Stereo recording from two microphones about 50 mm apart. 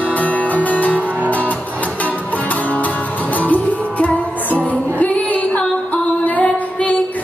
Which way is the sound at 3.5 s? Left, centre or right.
Left.